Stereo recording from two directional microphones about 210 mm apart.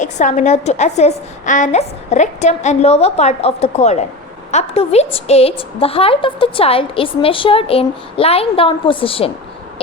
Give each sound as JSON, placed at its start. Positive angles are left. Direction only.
{"t": 0.0, "sound": "a woman's voice", "side_deg": 35}